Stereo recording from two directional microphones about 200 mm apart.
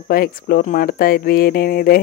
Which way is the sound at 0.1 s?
50° left (ahead or behind).